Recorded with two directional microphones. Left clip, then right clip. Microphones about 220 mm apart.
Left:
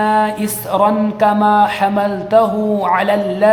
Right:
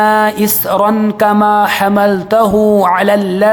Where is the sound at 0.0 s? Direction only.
35° right (ahead or behind).